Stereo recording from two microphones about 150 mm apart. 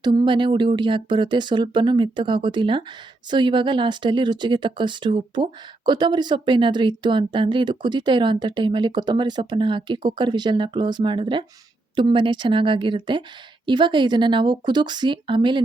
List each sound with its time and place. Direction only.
0.0 s speech: 30° right (ahead or behind)